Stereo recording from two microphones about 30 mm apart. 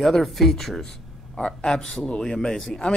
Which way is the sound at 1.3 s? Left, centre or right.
Left.